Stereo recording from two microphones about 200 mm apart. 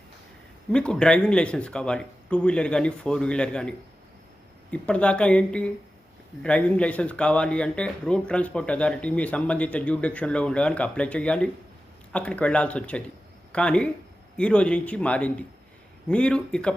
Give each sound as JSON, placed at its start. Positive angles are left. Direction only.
{"t": 0.7, "sound": "speech", "side_deg": 5}